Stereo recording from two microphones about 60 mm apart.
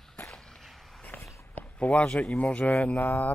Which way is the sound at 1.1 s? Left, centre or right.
Left.